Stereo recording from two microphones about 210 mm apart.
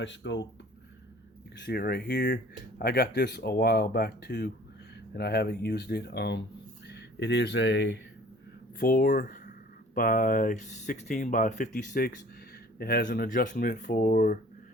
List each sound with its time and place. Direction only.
0.0 s speech: 60° left (ahead or behind)
1.6 s speech: 50° left (ahead or behind)
8.8 s speech: 45° left (ahead or behind)